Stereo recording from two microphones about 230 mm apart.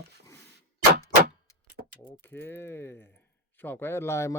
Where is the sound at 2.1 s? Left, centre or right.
Centre.